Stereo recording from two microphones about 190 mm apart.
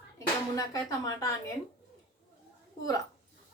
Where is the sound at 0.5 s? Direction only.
20° left (ahead or behind).